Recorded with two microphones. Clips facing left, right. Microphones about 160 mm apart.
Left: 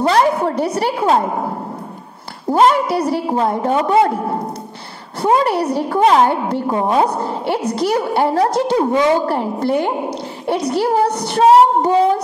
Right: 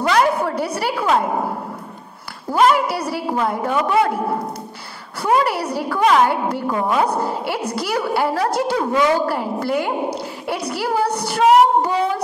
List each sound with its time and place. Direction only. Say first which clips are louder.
0.0 s a sound: left 3 dB; 30° left (ahead or behind)
0.7 s a woman's voice: left 2 dB; 30° left (ahead or behind)
2.4 s a woman's voice: left 3 dB; 30° left (ahead or behind)
5.2 s a woman's voice: left 3 dB; 25° left (ahead or behind)